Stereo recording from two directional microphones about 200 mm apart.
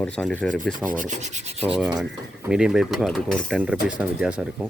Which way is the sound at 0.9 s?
40° right (ahead or behind).